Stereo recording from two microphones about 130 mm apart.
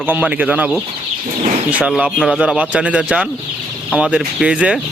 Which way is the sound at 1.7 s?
10° right (ahead or behind).